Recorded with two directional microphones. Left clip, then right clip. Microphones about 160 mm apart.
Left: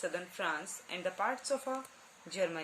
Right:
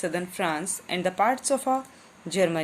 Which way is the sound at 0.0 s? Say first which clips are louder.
Right 9 dB; 25° right (ahead or behind).